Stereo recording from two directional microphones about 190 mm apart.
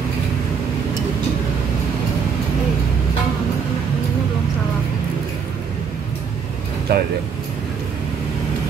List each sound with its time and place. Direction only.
6.9 s speech: 55° right (ahead or behind)